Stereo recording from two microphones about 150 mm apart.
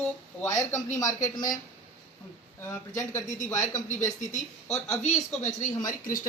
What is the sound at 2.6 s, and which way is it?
Speech, 20° left (ahead or behind).